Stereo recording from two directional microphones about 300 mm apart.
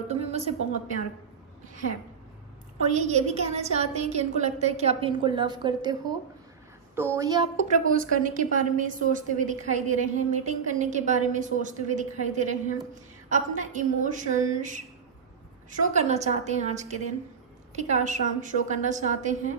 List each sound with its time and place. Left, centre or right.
0.1 s a woman's voice: right
2.9 s a woman's voice: right